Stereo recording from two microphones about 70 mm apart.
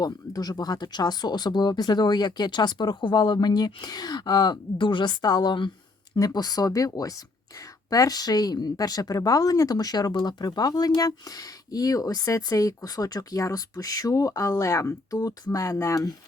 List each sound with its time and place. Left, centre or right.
0.0 s speech: left
5.0 s speech: left
6.1 s speech: left